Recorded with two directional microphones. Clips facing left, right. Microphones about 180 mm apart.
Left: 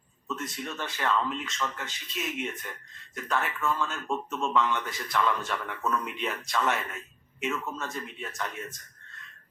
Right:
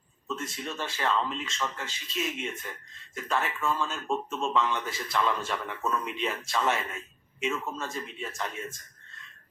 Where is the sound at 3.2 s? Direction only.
20° right (ahead or behind).